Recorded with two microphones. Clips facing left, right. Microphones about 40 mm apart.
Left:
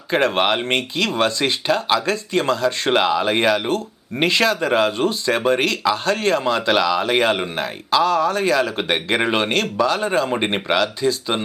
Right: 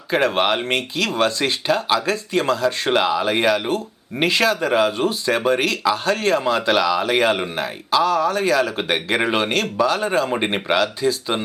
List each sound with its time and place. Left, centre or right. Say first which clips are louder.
0.1 s a man's voice: even; centre
2.9 s a man's voice: left 2 dB; centre
4.3 s speech: even; centre
4.6 s a man's voice: even; centre
4.9 s speech: left 1 dB; centre
5.3 s a man's voice: even; centre